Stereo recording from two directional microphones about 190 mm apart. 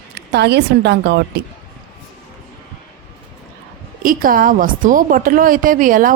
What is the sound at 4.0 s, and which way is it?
A woman's voice, 45° right (ahead or behind).